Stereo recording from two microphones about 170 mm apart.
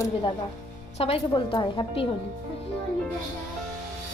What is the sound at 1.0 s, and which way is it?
A woman's voice, 35° left (ahead or behind).